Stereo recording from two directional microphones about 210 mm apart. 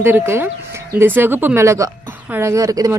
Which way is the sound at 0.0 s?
10° right (ahead or behind).